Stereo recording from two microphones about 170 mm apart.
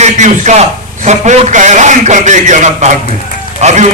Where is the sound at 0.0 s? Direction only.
45° right (ahead or behind).